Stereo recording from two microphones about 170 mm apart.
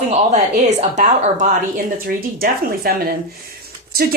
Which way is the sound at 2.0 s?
60° right (ahead or behind).